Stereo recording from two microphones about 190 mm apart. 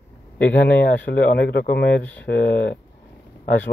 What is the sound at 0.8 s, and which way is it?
Speech, 60° left (ahead or behind).